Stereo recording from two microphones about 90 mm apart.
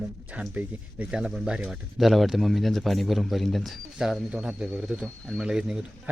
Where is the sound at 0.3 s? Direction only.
15° right (ahead or behind).